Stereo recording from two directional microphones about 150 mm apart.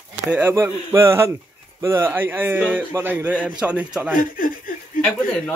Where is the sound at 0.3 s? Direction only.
15° right (ahead or behind).